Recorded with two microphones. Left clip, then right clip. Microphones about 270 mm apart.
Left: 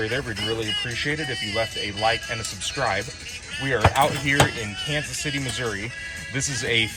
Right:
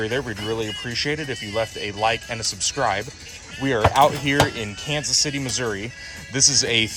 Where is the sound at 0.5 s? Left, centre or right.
Centre.